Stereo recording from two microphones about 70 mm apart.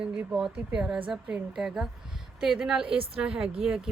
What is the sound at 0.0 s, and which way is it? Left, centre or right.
A woman's voice, centre.